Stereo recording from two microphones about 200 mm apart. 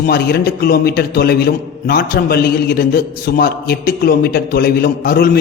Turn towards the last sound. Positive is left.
turn(degrees=50)  # may be behind; listen again after turning